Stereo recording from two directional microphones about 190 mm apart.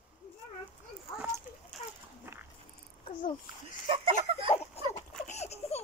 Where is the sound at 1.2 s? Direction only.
10° right (ahead or behind).